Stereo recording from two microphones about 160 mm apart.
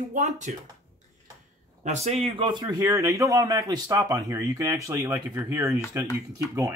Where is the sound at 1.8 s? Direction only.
45° right (ahead or behind); by 5.7 s 15° right (ahead or behind).